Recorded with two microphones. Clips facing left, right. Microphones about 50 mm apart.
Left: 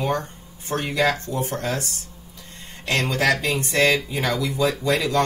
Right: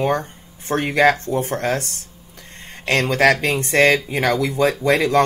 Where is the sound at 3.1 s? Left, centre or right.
Right.